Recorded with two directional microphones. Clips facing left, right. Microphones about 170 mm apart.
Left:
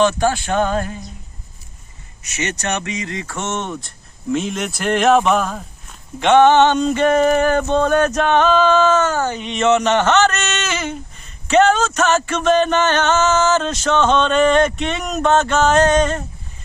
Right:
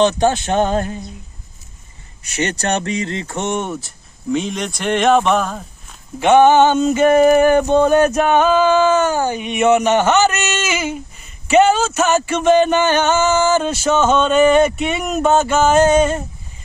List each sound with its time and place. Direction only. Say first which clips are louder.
0.0 s speech: right 2 dB; 20° right (ahead or behind)
2.2 s speech: right 4 dB; 30° right (ahead or behind); by 16.2 s 10° right (ahead or behind)